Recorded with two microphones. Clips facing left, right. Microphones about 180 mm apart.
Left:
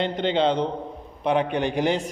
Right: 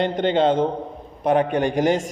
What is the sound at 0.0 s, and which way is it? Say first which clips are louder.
Speech: right 3 dB; 50° right (ahead or behind).